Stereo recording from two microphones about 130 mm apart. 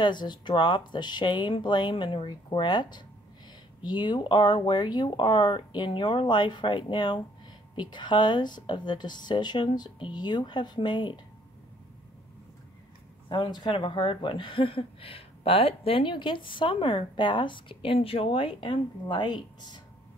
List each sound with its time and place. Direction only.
0.0 s speech: 35° left (ahead or behind)
13.3 s speech: 35° left (ahead or behind)